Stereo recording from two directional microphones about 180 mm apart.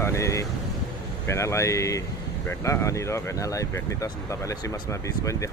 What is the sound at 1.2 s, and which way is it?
Speech, 15° left (ahead or behind).